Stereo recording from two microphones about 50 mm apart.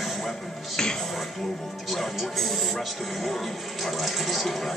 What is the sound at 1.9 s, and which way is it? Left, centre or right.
Speech, centre.